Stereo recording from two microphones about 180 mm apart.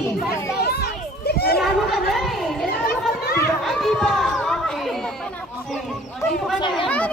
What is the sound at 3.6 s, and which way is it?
Chatter, centre (ahead or behind).